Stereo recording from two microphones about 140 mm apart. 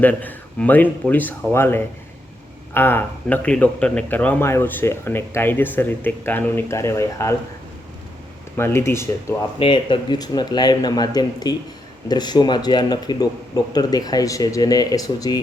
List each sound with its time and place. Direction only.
0.0 s speech: 10° left (ahead or behind)
8.5 s speech: 15° left (ahead or behind)
9.6 s speech: 35° left (ahead or behind)